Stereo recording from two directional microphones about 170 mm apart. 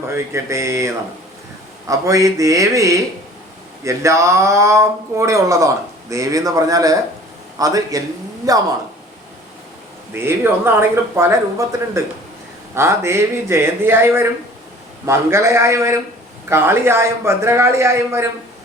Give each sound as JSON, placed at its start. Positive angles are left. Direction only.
{"t": 0.1, "sound": "a man's voice", "side_deg": -15}
{"t": 10.2, "sound": "speech", "side_deg": -15}
{"t": 12.7, "sound": "speech", "side_deg": -15}